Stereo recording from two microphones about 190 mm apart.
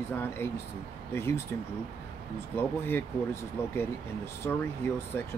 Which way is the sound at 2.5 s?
10° left (ahead or behind).